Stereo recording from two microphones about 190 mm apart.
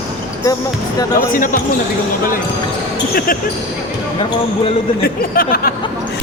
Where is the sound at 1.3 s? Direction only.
45° left (ahead or behind).